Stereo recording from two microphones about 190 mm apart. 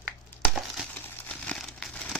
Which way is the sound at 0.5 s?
Centre (ahead or behind).